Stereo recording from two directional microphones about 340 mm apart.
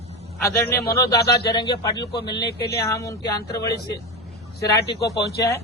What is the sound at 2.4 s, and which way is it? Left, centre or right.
Speech, left.